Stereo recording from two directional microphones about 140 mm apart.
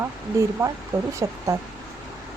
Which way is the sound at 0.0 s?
20° right (ahead or behind).